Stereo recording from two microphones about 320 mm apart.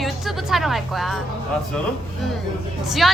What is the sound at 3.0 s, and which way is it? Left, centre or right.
Speech, centre.